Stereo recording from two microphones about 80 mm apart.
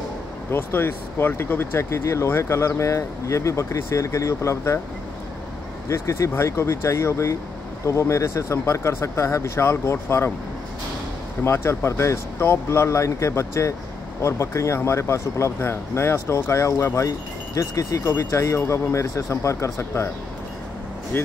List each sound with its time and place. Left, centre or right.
0.5 s speech: left
5.9 s speech: left
11.4 s speech: left
18.0 s speech: left